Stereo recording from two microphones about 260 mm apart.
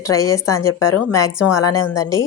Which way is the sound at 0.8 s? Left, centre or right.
Left.